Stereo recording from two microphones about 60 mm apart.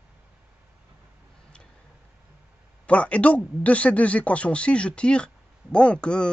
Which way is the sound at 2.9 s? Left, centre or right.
Left.